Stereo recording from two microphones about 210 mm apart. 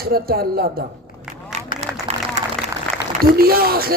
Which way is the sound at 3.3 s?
45° right (ahead or behind).